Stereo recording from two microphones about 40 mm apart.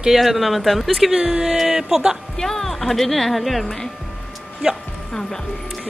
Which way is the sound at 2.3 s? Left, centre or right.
Centre.